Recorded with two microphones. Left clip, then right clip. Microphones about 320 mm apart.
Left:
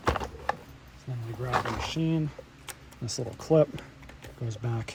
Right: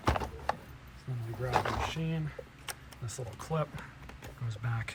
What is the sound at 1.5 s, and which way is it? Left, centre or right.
Roaring cats, centre.